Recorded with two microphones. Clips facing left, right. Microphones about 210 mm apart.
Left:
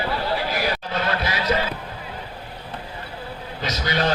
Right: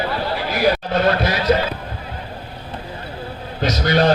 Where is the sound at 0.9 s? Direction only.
50° right (ahead or behind).